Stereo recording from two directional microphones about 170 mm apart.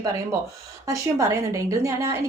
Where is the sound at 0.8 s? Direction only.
20° right (ahead or behind).